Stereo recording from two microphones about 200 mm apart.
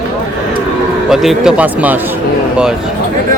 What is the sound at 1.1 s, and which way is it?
Speech, centre (ahead or behind).